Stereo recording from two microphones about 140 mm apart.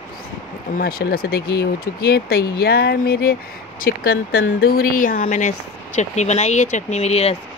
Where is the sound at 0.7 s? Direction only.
90° left.